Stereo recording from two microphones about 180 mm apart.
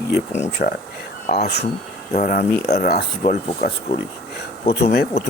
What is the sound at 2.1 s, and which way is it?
Speech, 45° left (ahead or behind).